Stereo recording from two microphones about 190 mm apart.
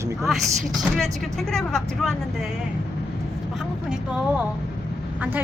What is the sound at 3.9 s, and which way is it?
Speech, 5° right (ahead or behind).